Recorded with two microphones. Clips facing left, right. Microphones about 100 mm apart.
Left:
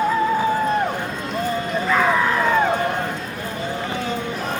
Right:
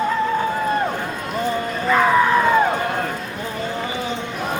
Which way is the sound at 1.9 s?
5° right (ahead or behind).